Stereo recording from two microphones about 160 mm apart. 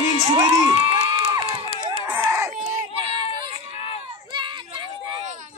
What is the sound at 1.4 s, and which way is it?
Crowd, 40° right (ahead or behind).